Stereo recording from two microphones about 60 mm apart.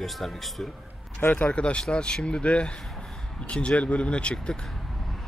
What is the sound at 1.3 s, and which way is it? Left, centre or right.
Speech, centre.